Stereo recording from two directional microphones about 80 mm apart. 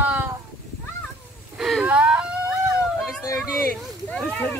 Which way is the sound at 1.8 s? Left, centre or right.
Centre.